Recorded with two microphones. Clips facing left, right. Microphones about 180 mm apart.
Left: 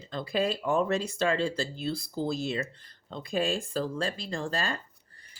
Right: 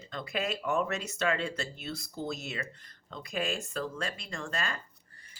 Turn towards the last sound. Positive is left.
turn(degrees=30)  # may be behind; listen again after turning